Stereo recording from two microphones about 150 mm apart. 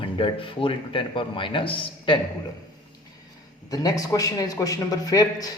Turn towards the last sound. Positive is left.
turn(degrees=25)  # may be behind; listen again after turning